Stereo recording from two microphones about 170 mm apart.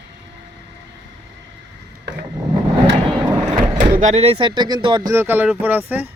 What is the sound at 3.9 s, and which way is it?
Speech, 45° right (ahead or behind).